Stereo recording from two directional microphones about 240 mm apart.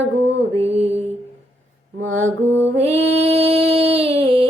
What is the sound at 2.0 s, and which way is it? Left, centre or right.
Mantra, right.